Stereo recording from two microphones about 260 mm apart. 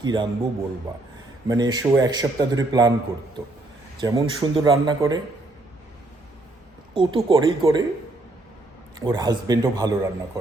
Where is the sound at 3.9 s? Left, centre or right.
Centre.